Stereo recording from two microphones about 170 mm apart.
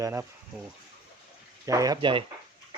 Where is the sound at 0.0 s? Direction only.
15° right (ahead or behind).